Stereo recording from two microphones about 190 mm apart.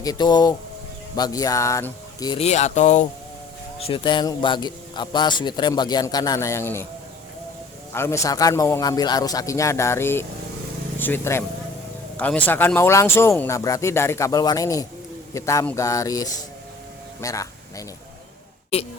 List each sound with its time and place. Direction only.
0.0 s speech: 20° left (ahead or behind)
2.4 s speech: 35° left (ahead or behind); by 6.8 s 15° left (ahead or behind)
7.9 s speech: 15° left (ahead or behind)